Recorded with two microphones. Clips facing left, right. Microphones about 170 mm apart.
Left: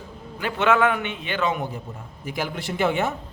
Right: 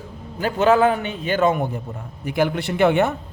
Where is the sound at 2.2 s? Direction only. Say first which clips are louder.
Right 8 dB; 60° right (ahead or behind).